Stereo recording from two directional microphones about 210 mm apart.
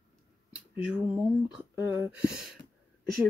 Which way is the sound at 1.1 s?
5° right (ahead or behind).